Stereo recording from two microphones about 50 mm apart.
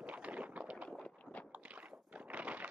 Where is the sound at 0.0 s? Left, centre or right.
Right.